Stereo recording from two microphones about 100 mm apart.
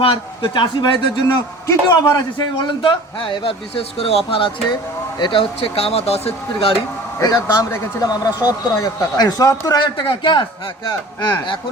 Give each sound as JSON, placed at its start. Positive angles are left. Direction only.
{"t": 0.4, "sound": "a man's voice", "side_deg": 50}
{"t": 1.6, "sound": "a man's voice", "side_deg": 45}
{"t": 4.3, "sound": "a man's voice", "side_deg": 60}
{"t": 5.5, "sound": "speech", "side_deg": 80}
{"t": 7.2, "sound": "a man's voice", "side_deg": 35}
{"t": 9.7, "sound": "a man's voice", "side_deg": 50}